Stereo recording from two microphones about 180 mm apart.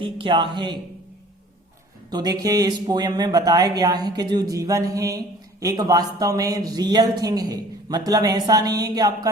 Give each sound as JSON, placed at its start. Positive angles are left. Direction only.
{"t": 0.0, "sound": "speech", "side_deg": -25}
{"t": 2.0, "sound": "speech", "side_deg": -20}